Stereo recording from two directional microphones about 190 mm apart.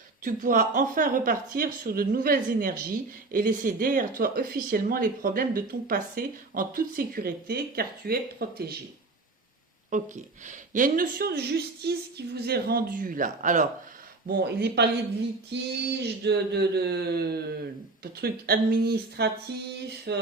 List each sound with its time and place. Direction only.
0.3 s speech: 45° right (ahead or behind)
9.9 s speech: 40° right (ahead or behind)
14.3 s a sound: 55° right (ahead or behind)